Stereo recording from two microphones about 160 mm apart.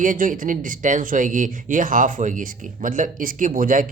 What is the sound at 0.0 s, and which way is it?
Speech, 55° right (ahead or behind).